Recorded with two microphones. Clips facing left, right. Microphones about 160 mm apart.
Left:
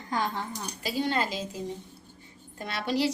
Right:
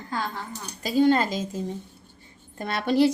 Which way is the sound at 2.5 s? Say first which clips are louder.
Right 7 dB; 50° right (ahead or behind).